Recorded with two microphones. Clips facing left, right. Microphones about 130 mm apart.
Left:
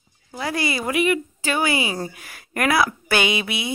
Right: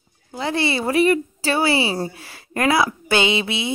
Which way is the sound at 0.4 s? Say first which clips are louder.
Right 3 dB; 25° right (ahead or behind).